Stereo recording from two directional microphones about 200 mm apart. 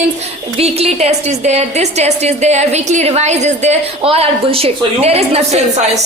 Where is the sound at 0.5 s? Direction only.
30° right (ahead or behind).